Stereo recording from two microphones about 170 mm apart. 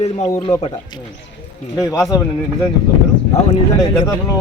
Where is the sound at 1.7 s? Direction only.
20° left (ahead or behind).